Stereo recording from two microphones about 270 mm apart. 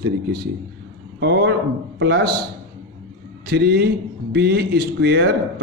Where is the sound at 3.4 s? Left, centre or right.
Right.